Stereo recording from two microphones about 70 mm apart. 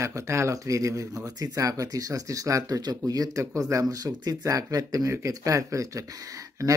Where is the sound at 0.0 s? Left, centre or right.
Right.